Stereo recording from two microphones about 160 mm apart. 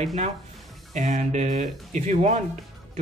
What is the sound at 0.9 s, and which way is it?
Speech, 50° right (ahead or behind).